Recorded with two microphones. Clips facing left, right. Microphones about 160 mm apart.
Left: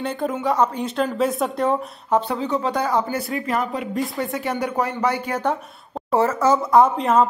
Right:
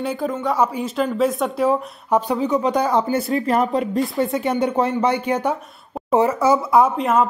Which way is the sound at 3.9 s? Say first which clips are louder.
Right 4 dB; 20° right (ahead or behind).